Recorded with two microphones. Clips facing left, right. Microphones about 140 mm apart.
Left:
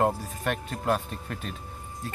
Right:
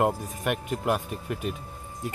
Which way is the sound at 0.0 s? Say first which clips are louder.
Right 1 dB; 15° right (ahead or behind).